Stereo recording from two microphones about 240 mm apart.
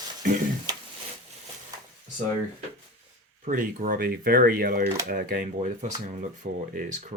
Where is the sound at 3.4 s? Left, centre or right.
Right.